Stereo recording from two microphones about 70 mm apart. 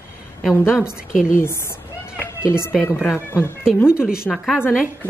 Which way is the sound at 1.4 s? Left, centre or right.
Left.